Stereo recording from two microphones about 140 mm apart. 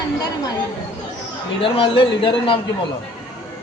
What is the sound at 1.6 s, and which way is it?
Speech, 40° left (ahead or behind).